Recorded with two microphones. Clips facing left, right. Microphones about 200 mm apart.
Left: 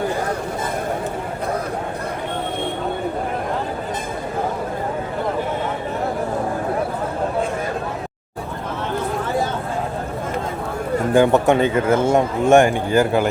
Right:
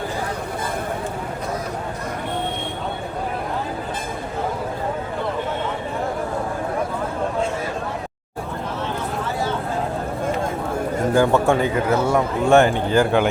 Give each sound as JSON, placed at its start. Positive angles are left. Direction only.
{"t": 11.1, "sound": "a man's voice", "side_deg": 20}